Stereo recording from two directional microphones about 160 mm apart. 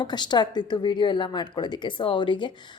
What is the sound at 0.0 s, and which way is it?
Speech, 25° left (ahead or behind).